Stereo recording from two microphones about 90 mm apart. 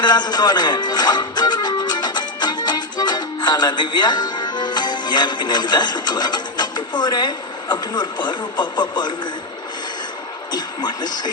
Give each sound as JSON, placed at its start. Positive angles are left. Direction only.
{"t": 0.0, "sound": "speech", "side_deg": 50}
{"t": 10.5, "sound": "speech", "side_deg": 55}